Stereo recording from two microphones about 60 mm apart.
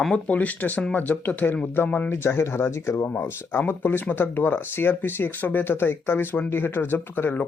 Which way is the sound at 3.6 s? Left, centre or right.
Left.